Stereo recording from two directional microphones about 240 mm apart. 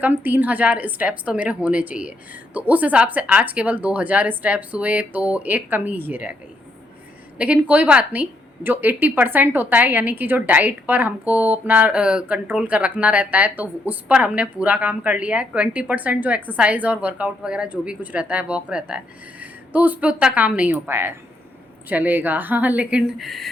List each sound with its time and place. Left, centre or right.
0.0 s a woman's voice: centre
7.3 s a woman's voice: centre